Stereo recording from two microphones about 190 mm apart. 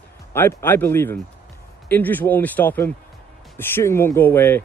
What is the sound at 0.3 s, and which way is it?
Speech, 15° left (ahead or behind).